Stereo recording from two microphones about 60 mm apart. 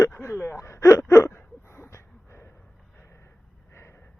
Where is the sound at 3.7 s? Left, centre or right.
Left.